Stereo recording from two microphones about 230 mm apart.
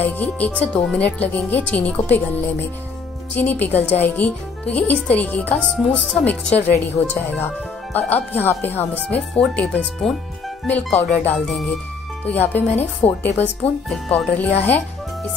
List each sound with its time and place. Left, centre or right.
0.0 s speech: centre